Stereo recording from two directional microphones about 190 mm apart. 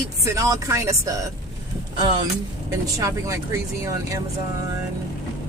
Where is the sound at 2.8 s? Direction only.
15° right (ahead or behind).